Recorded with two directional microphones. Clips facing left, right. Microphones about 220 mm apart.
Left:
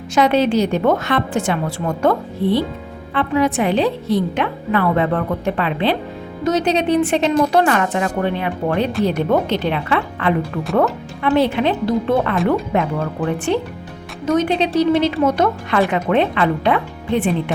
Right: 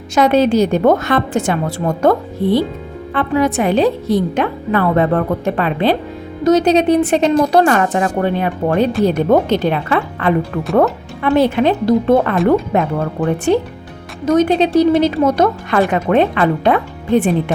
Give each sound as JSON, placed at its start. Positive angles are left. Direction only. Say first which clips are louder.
{"t": 0.1, "sound": "a woman's voice", "louder": "right 3 dB", "side_deg": -45}